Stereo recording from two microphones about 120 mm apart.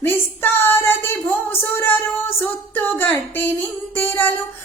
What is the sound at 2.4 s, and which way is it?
Music, 15° left (ahead or behind).